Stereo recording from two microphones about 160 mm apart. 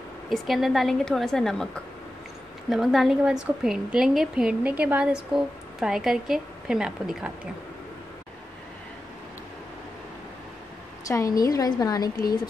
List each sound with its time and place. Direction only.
0.3 s a woman's voice: centre (ahead or behind)
2.7 s a woman's voice: centre (ahead or behind)
11.1 s a woman's voice: 20° left (ahead or behind)